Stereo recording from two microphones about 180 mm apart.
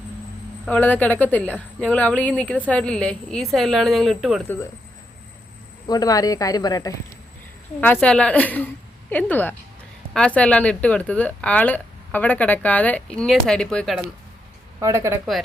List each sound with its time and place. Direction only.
0.6 s speech: 10° left (ahead or behind)
5.9 s speech: 20° left (ahead or behind)
8.0 s speech: 5° left (ahead or behind)
14.8 s speech: 15° right (ahead or behind)